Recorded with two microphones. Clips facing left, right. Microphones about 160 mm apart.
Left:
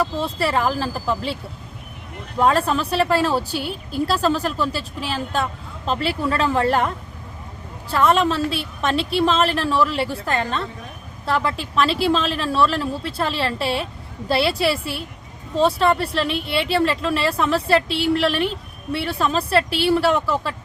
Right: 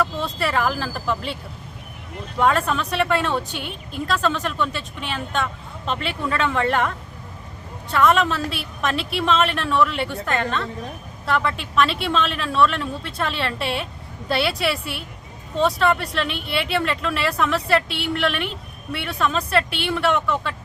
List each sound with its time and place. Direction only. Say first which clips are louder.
0.0 s speech: left 2 dB; 30° left (ahead or behind)
2.4 s a woman's voice: left 2 dB; 30° left (ahead or behind)